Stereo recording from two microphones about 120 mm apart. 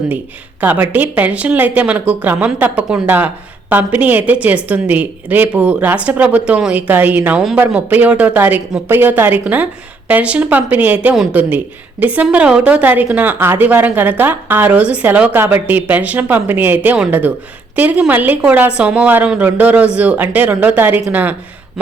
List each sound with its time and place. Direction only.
0.6 s speech: 15° right (ahead or behind)
11.1 s speech: centre (ahead or behind)
11.3 s speech: 15° right (ahead or behind)